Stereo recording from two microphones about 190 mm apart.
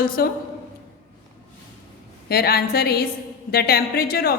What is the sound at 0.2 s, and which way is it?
Speech, 55° left (ahead or behind).